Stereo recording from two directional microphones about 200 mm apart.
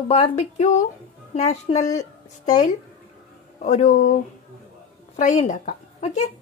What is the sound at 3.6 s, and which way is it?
Speech, 35° left (ahead or behind).